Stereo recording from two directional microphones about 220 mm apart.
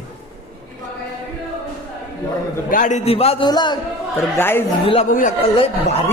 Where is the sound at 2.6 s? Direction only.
35° left (ahead or behind); by 4.6 s 10° left (ahead or behind).